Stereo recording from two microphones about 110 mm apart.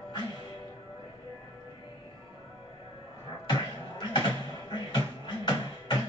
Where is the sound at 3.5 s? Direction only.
40° left (ahead or behind).